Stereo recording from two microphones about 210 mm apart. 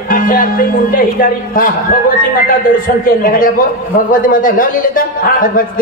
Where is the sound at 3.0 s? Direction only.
40° left (ahead or behind).